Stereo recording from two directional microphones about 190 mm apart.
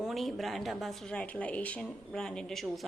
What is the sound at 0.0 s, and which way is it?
Speech, centre (ahead or behind).